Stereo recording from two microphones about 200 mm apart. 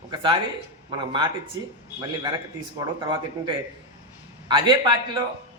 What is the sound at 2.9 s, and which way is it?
A man's voice, 20° right (ahead or behind).